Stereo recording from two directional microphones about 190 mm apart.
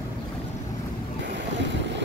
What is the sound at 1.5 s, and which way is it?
Boat, 70° right (ahead or behind).